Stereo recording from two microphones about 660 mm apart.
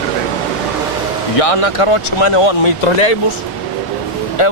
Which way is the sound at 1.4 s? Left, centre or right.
Left.